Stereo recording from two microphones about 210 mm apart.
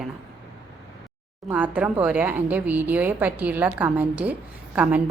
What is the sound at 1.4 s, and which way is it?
Speech, 10° right (ahead or behind).